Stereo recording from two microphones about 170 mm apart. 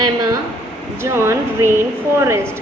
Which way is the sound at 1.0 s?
15° right (ahead or behind).